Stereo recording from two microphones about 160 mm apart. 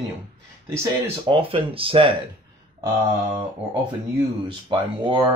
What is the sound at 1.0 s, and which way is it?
Speech, 35° right (ahead or behind).